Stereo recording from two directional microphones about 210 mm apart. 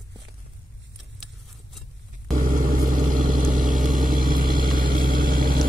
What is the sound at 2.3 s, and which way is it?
Vehicle, 40° right (ahead or behind).